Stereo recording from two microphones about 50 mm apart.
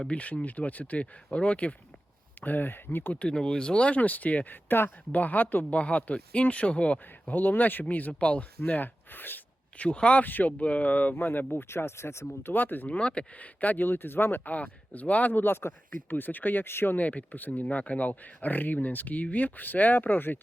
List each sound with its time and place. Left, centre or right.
0.1 s speech: left
2.4 s speech: left
3.2 s speech: centre
3.9 s speech: left
7.3 s speech: left
9.7 s speech: left
10.2 s speech: left
10.6 s speech: left
11.5 s speech: left
12.5 s speech: left
12.9 s speech: left
14.5 s speech: left
17.0 s speech: left